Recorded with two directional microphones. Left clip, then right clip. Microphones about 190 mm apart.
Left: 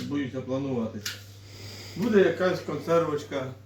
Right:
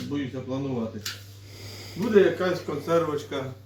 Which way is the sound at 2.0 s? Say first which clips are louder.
Right 2 dB; 10° left (ahead or behind).